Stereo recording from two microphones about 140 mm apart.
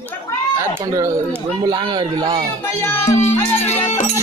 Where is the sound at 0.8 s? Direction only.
25° right (ahead or behind).